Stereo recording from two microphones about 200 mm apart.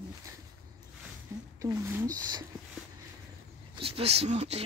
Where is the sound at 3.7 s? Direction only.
30° right (ahead or behind).